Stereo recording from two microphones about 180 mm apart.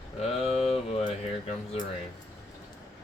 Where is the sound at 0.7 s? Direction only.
35° left (ahead or behind).